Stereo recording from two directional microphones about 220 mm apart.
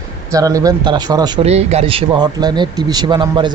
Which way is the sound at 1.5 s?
30° right (ahead or behind).